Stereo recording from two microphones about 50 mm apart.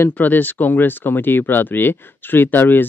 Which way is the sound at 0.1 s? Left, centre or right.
Left.